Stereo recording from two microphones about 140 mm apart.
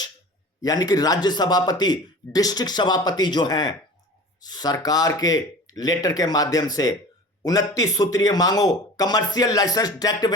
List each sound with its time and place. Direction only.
0.6 s a man's voice: 25° left (ahead or behind)